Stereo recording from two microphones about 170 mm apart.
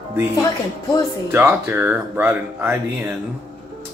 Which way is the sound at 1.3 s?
10° right (ahead or behind).